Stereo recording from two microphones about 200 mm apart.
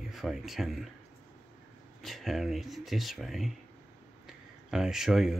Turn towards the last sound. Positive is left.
turn(degrees=0)  # may be behind; listen again after turning